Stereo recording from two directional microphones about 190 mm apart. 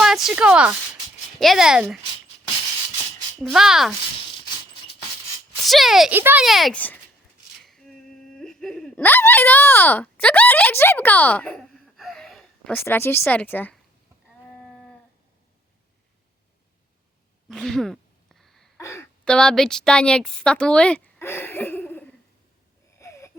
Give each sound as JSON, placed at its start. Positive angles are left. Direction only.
{"t": 0.0, "sound": "speech", "side_deg": -5}
{"t": 3.4, "sound": "speech", "side_deg": 0}
{"t": 5.5, "sound": "speech", "side_deg": 0}
{"t": 7.6, "sound": "a sound", "side_deg": 0}
{"t": 12.7, "sound": "speech", "side_deg": 10}
{"t": 17.5, "sound": "a sound", "side_deg": 0}
{"t": 18.8, "sound": "a sound", "side_deg": 15}
{"t": 19.2, "sound": "a woman's voice", "side_deg": 5}
{"t": 23.0, "sound": "wheeze", "side_deg": 15}